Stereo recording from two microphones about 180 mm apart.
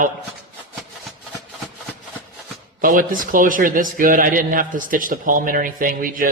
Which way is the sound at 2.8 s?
50° right (ahead or behind).